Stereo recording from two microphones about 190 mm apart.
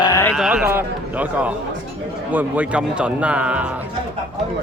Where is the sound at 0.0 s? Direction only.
15° left (ahead or behind).